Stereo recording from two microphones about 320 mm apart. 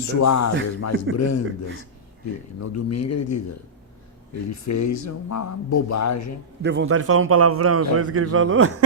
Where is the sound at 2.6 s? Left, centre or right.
Left.